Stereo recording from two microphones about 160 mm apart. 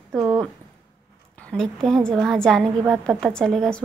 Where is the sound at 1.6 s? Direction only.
5° left (ahead or behind).